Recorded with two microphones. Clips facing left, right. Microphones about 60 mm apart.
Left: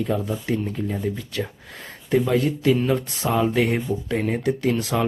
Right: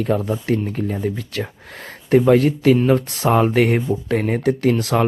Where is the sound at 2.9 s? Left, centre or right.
Centre.